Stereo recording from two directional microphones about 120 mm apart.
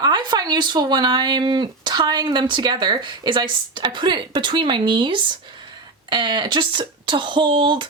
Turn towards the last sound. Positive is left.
turn(degrees=-45)  # may be behind; listen again after turning